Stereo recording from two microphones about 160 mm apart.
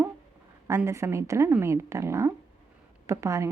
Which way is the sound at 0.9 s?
20° right (ahead or behind).